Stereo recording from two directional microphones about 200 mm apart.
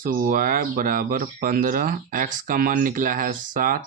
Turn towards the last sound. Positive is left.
turn(degrees=-45)  # may be behind; listen again after turning